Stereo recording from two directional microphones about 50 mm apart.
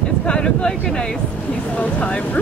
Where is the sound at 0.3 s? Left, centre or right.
Centre.